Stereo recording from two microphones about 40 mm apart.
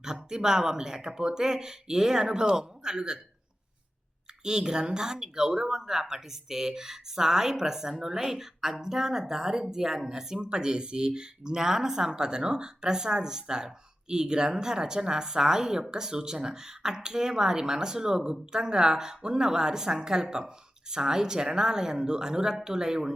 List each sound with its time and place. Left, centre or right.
0.0 s speech: centre
4.4 s speech: centre